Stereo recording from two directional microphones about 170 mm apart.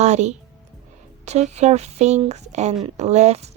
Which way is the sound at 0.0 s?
45° right (ahead or behind).